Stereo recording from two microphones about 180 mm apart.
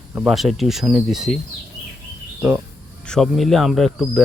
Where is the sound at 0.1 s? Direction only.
Centre (ahead or behind).